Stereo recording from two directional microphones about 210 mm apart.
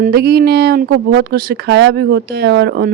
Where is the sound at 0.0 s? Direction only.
50° right (ahead or behind).